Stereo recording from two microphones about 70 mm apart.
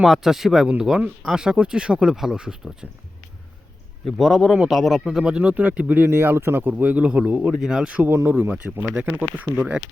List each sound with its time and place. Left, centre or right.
0.0 s speech: centre
4.0 s speech: centre
8.0 s speech: right